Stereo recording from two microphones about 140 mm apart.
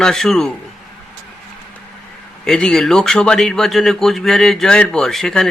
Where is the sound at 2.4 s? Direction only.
5° left (ahead or behind).